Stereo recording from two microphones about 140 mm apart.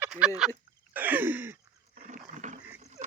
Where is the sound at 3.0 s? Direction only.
55° right (ahead or behind).